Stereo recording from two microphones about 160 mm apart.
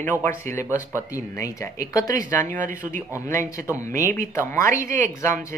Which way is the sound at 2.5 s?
55° right (ahead or behind).